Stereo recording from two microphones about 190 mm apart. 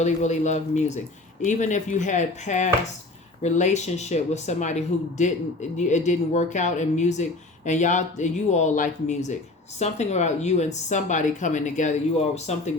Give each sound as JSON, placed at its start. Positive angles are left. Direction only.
{"t": 0.0, "sound": "speech", "side_deg": 40}